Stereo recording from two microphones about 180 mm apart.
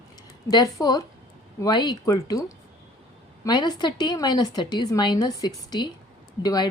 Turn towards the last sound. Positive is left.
turn(degrees=20)  # may be behind; listen again after turning